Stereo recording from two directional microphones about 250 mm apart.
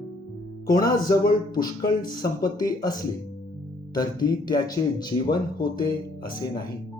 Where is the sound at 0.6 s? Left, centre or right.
Centre.